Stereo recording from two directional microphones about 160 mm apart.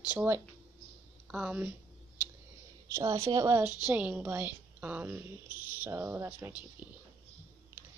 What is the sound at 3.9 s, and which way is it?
Speech, 10° right (ahead or behind).